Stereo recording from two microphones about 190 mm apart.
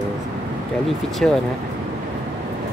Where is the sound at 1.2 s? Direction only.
5° left (ahead or behind).